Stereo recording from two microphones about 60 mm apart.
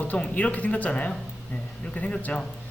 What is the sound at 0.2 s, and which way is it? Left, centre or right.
Speech, centre.